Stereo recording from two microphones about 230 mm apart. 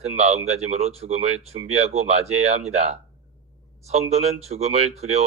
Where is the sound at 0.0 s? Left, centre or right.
Right.